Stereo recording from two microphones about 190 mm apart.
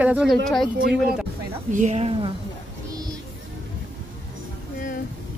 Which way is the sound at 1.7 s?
40° right (ahead or behind).